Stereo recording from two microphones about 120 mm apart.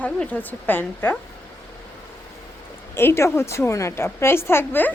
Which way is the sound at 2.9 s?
20° left (ahead or behind).